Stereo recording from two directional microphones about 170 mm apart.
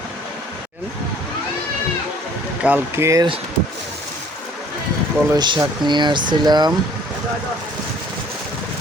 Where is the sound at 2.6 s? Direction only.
10° right (ahead or behind).